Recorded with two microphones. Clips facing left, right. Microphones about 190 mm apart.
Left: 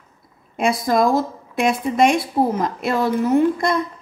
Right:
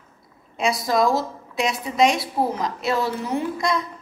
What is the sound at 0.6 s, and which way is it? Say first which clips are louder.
A woman's voice: left 3 dB; 50° left (ahead or behind).